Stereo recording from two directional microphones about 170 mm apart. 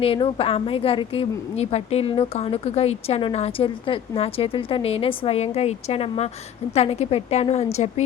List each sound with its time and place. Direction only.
0.0 s a woman's voice: 35° left (ahead or behind)